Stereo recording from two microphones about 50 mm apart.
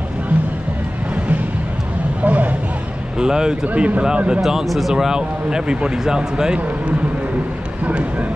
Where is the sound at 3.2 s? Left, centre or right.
Centre.